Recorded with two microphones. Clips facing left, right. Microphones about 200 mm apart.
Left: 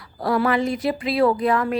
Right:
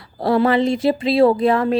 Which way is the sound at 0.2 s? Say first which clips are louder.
Right 4 dB; 25° right (ahead or behind).